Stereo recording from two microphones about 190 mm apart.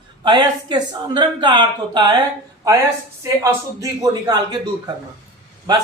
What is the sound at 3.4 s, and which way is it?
Speech, 15° right (ahead or behind).